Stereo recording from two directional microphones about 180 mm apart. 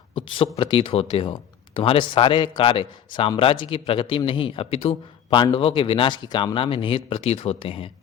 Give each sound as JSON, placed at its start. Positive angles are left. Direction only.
{"t": 0.3, "sound": "speech", "side_deg": 30}